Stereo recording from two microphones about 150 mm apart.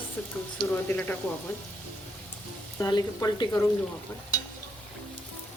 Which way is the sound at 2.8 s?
25° left (ahead or behind).